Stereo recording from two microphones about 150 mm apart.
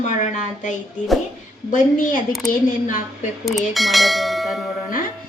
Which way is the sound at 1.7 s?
65° left (ahead or behind).